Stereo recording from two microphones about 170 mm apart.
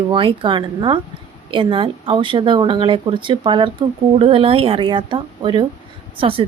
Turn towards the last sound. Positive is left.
turn(degrees=-30)  # may be behind; listen again after turning